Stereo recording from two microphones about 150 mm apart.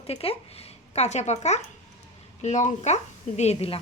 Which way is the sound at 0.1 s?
40° left (ahead or behind).